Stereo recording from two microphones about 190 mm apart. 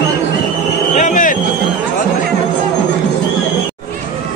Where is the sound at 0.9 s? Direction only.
40° left (ahead or behind).